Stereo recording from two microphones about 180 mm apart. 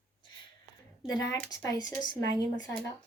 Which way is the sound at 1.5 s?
20° left (ahead or behind).